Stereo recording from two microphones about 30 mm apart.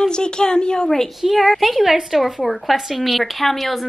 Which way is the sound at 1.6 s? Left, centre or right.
Centre.